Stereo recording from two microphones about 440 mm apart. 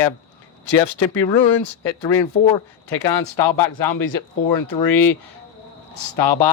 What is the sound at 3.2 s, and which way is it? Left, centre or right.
Speech, left.